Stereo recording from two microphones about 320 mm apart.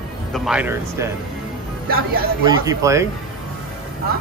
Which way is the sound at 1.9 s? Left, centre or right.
Right.